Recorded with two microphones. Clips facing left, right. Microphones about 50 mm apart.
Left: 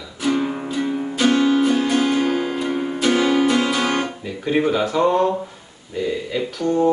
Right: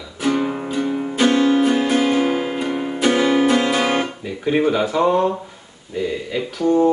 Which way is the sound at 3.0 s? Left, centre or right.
Centre.